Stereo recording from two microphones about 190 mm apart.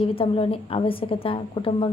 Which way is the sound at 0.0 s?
30° left (ahead or behind).